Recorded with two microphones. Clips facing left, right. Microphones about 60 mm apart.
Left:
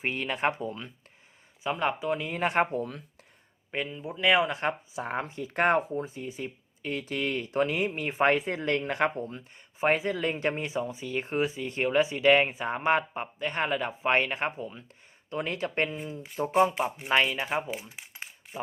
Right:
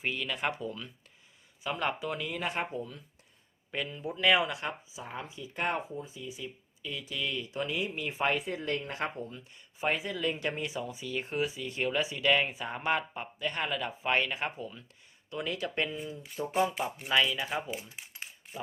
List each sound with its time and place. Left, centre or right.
0.0 s speech: left
1.6 s speech: centre
2.5 s speech: left
3.7 s speech: left
4.4 s speech: left
4.9 s speech: left
8.4 s speech: left
9.0 s speech: left
16.7 s speech: left
17.1 s speech: left
17.8 s speech: left